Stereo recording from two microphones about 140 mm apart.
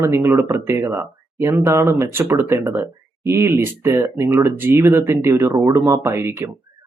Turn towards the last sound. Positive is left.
turn(degrees=-15)  # may be behind; listen again after turning